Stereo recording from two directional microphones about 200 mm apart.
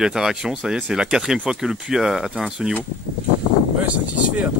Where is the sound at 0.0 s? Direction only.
5° right (ahead or behind).